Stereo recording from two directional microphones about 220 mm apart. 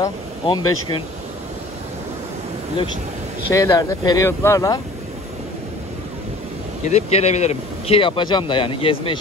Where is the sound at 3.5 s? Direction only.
15° left (ahead or behind).